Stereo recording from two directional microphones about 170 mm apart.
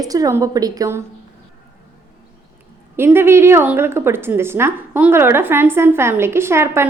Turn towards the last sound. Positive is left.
turn(degrees=-15)  # may be behind; listen again after turning